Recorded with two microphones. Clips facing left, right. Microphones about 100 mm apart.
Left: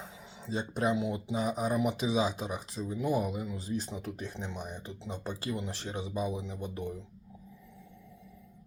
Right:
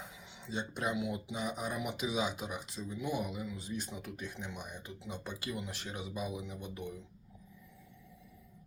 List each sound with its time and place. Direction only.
0.4 s speech: 35° left (ahead or behind)